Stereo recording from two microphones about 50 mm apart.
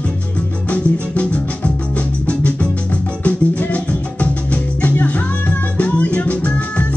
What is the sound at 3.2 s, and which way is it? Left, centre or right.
Music, left.